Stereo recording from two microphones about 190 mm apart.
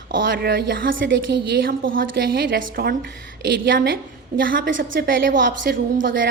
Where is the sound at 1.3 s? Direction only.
60° right (ahead or behind).